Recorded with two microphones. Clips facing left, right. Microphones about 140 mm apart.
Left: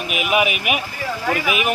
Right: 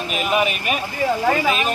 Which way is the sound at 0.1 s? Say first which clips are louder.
Left 1 dB; 10° left (ahead or behind).